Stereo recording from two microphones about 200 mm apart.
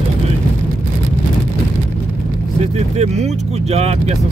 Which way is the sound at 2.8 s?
35° right (ahead or behind).